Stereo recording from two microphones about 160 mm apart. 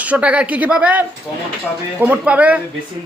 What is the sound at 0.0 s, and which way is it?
Speech, 10° right (ahead or behind).